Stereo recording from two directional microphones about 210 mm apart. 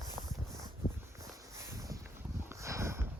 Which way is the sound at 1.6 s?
15° right (ahead or behind).